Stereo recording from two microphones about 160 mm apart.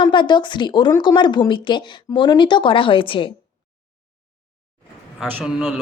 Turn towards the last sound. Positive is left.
turn(degrees=0)  # may be behind; listen again after turning